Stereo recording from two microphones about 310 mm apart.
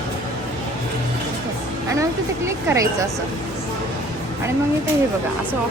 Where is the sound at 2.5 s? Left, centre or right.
Centre.